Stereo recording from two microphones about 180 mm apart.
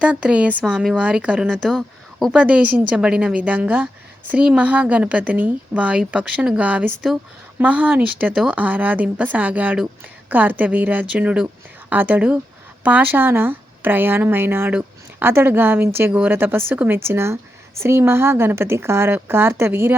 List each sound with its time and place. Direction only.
0.0 s a woman's voice: 5° right (ahead or behind)